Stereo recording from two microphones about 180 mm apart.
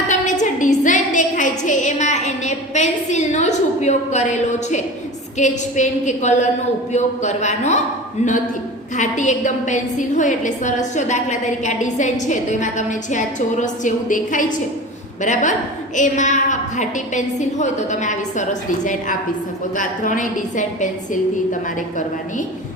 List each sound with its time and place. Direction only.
0.1 s a sound: 45° left (ahead or behind)
5.4 s a woman's voice: 40° left (ahead or behind)
9.0 s a woman's voice: 40° left (ahead or behind)
19.7 s a woman's voice: 45° left (ahead or behind)